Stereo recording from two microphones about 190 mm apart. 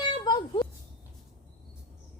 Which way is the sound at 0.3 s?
20° left (ahead or behind).